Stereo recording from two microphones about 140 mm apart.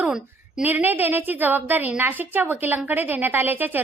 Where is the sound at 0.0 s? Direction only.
5° right (ahead or behind).